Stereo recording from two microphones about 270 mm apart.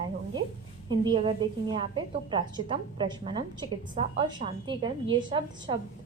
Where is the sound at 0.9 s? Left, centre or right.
Centre.